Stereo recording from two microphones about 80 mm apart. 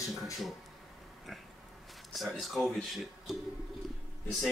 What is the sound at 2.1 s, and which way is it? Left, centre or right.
A man's voice, centre.